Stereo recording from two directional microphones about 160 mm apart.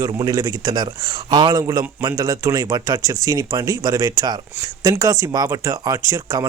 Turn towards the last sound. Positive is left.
turn(degrees=-25)  # may be behind; listen again after turning